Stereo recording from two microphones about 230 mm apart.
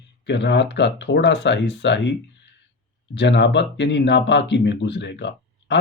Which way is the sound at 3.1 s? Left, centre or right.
Left.